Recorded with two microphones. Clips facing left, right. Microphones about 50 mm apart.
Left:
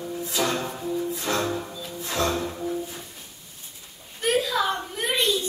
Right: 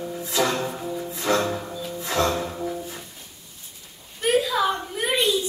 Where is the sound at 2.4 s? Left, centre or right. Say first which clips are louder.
Right 1 dB; centre.